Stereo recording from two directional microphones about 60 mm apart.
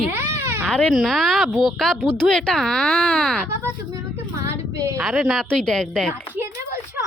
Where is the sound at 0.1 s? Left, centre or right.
Right.